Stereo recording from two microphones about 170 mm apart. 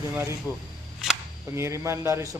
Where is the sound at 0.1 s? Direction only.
15° right (ahead or behind).